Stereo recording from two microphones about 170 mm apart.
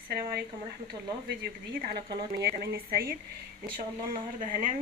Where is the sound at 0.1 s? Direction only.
65° right (ahead or behind).